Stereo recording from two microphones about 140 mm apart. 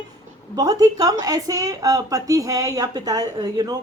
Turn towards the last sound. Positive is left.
turn(degrees=-25)  # may be behind; listen again after turning